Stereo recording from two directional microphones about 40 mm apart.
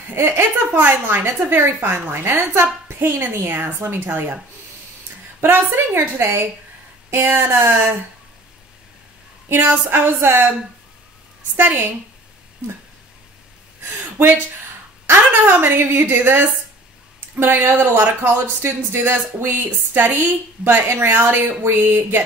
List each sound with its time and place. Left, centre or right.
0.1 s speech: right
5.4 s speech: right
7.1 s speech: right
9.8 s speech: right
11.5 s a woman's voice: right
15.0 s a woman's voice: right
18.3 s speech: right